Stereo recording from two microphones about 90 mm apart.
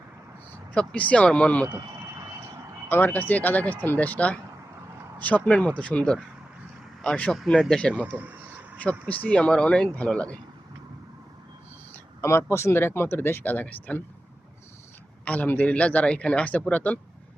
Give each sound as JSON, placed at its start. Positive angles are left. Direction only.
{"t": 0.7, "sound": "speech", "side_deg": 15}
{"t": 2.9, "sound": "speech", "side_deg": 20}
{"t": 8.1, "sound": "a sound", "side_deg": -20}
{"t": 8.8, "sound": "speech", "side_deg": 15}
{"t": 12.2, "sound": "speech", "side_deg": 30}
{"t": 15.2, "sound": "speech", "side_deg": 15}